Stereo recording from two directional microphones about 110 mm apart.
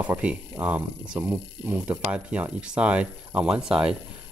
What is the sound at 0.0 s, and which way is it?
Speech, 10° right (ahead or behind).